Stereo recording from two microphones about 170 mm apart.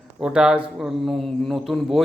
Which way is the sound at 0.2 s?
5° right (ahead or behind).